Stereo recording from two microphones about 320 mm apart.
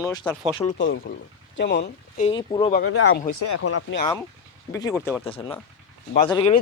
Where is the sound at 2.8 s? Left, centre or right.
Left.